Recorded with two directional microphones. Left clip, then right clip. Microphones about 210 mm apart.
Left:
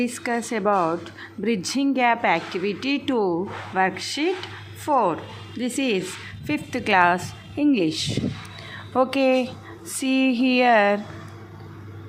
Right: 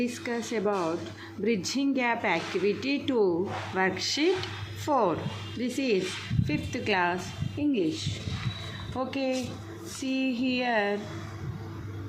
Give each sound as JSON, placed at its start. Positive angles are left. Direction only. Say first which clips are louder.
{"t": 0.0, "sound": "a woman's voice", "louder": "left 6 dB", "side_deg": 20}